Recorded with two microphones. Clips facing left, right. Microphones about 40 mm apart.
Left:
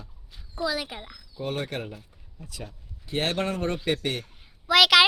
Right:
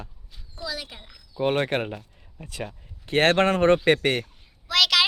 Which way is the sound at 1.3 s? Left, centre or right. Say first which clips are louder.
Right 8 dB; right.